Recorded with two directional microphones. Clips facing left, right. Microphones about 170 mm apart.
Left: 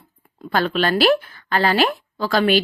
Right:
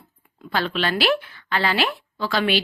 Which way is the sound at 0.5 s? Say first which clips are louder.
Left 4 dB; 45° left (ahead or behind).